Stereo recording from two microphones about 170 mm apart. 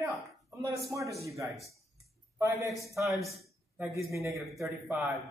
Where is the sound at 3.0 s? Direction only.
Centre (ahead or behind).